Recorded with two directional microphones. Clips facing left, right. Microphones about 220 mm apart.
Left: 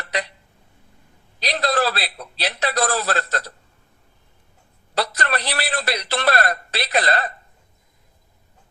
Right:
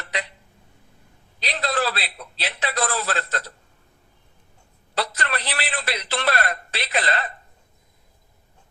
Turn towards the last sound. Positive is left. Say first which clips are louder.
# left 4 dB
turn(degrees=40)  # may be behind; listen again after turning